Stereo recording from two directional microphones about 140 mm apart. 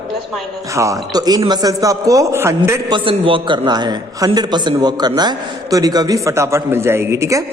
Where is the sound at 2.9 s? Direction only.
40° right (ahead or behind); by 7.4 s 20° right (ahead or behind).